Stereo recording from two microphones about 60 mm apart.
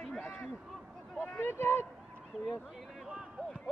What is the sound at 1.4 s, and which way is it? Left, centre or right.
Speech, left.